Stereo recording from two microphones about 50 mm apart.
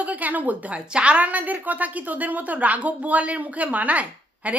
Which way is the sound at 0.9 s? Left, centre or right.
Right.